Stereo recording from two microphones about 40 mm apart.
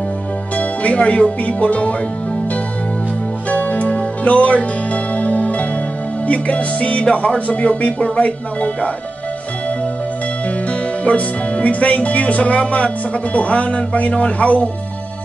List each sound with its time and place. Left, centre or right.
0.6 s speech: left
3.4 s music: left
6.2 s speech: left
10.7 s speech: left